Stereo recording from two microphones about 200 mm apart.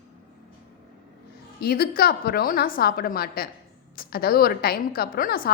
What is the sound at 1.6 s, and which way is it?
A woman's voice, 50° left (ahead or behind).